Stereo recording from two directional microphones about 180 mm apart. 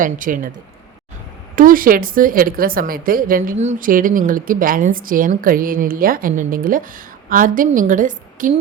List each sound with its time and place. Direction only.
0.0 s a woman's voice: 50° right (ahead or behind)
1.5 s a woman's voice: 50° right (ahead or behind)